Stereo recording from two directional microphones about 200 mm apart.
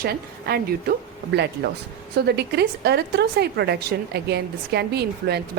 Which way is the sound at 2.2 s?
55° right (ahead or behind).